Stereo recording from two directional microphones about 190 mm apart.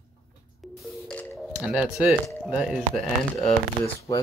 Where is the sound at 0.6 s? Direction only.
5° left (ahead or behind).